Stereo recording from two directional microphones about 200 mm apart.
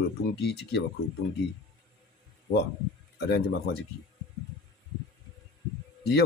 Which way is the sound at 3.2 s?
55° left (ahead or behind).